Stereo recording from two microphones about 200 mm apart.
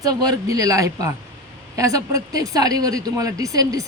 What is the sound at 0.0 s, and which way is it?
A woman's voice, 20° right (ahead or behind).